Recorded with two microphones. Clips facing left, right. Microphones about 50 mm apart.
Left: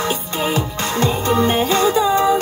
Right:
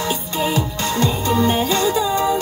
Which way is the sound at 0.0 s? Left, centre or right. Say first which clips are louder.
Left 1 dB; left.